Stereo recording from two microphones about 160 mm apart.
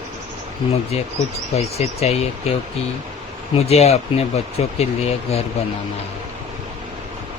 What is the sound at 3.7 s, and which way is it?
Speech, 40° left (ahead or behind).